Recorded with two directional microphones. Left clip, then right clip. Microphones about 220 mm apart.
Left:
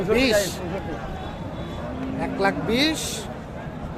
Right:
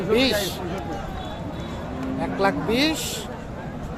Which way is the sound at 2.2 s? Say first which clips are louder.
Right 1 dB; centre (ahead or behind).